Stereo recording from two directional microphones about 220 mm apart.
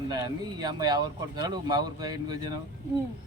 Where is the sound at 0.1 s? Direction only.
20° right (ahead or behind).